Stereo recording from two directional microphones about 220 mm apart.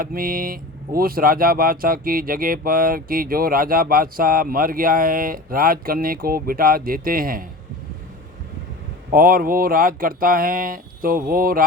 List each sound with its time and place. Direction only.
0.0 s speech: 40° right (ahead or behind)
9.1 s speech: 40° right (ahead or behind)